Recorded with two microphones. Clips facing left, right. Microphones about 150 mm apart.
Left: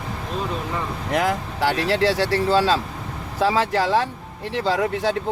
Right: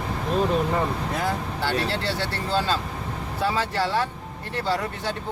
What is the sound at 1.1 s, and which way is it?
Speech, 90° left.